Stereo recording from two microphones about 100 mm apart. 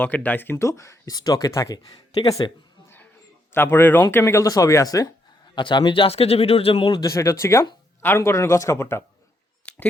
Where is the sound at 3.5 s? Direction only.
20° left (ahead or behind); by 5.0 s 35° left (ahead or behind).